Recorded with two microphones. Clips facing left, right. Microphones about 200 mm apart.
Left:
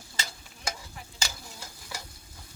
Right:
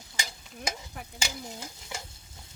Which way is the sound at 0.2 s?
20° right (ahead or behind).